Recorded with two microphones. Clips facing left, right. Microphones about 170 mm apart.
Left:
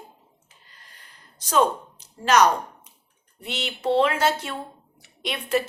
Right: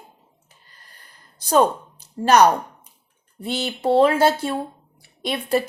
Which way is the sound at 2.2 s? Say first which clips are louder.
Right 4 dB; 35° right (ahead or behind).